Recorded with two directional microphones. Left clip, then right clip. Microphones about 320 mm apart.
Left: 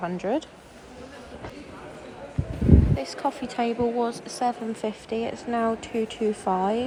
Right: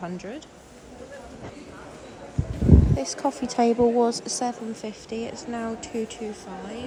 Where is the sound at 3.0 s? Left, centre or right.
Centre.